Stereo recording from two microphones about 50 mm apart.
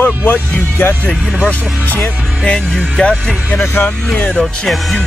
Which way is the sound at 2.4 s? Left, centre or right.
Centre.